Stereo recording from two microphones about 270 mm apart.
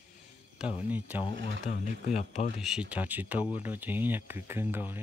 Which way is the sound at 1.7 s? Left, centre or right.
Left.